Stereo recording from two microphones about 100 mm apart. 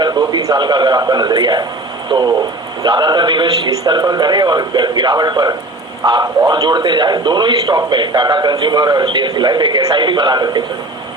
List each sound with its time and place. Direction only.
0.0 s a man's voice: 45° right (ahead or behind)